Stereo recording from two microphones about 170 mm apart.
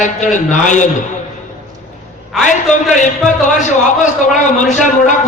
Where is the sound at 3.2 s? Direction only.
45° left (ahead or behind).